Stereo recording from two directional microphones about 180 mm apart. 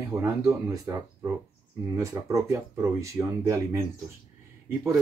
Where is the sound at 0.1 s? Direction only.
10° right (ahead or behind).